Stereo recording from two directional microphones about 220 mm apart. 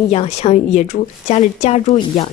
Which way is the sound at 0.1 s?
30° left (ahead or behind).